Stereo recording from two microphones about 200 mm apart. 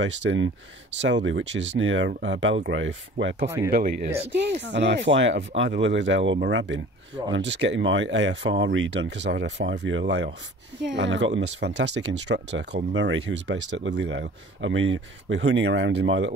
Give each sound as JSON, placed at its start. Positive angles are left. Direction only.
{"t": 0.0, "sound": "speech", "side_deg": -70}
{"t": 3.4, "sound": "speech", "side_deg": -15}
{"t": 3.7, "sound": "speech", "side_deg": -50}